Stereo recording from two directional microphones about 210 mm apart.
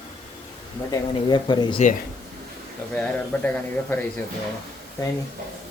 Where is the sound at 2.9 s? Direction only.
5° left (ahead or behind).